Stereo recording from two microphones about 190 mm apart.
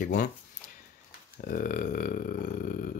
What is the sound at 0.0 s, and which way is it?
Speech, 55° left (ahead or behind).